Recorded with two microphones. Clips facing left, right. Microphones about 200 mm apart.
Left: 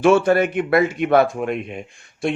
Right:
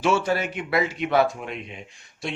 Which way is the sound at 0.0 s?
55° left (ahead or behind).